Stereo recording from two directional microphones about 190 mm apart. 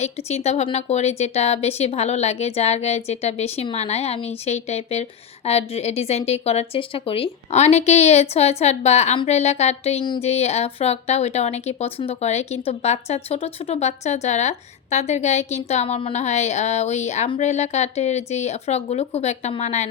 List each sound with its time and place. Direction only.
0.0 s a woman's voice: 35° left (ahead or behind)